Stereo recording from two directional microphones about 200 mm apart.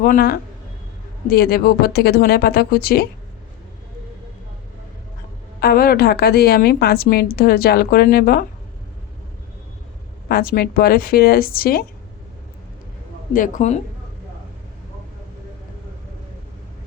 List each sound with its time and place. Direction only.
0.0 s a woman's voice: 50° left (ahead or behind)
5.5 s a woman's voice: 50° left (ahead or behind)
10.2 s a woman's voice: 45° left (ahead or behind)
13.3 s a woman's voice: 40° left (ahead or behind)